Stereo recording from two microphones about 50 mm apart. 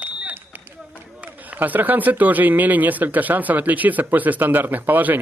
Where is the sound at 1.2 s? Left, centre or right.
Right.